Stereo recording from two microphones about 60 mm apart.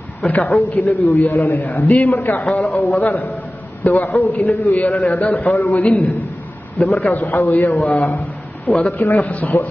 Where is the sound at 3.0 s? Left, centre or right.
Left.